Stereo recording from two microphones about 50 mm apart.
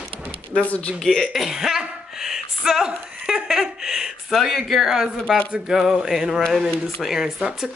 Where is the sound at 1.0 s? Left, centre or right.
Centre.